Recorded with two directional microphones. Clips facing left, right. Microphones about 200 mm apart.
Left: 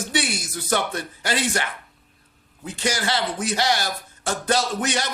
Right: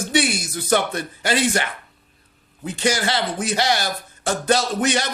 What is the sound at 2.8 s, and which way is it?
Speech, 25° right (ahead or behind).